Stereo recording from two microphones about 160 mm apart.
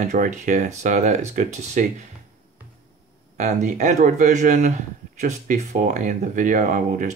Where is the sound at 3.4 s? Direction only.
50° right (ahead or behind).